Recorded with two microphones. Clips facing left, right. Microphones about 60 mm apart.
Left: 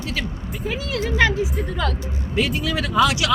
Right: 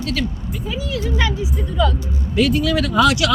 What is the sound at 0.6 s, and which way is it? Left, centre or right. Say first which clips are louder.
Speech: even; left.